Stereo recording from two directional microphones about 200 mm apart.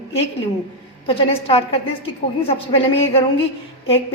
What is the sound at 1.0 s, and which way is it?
A woman's voice, 30° left (ahead or behind).